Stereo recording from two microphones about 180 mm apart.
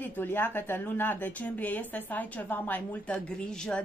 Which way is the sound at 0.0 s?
10° left (ahead or behind).